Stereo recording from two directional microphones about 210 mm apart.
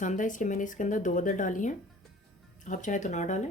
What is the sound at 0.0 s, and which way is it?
Speech, 35° left (ahead or behind).